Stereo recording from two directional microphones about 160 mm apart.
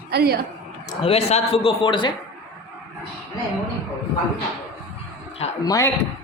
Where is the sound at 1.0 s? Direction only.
40° left (ahead or behind).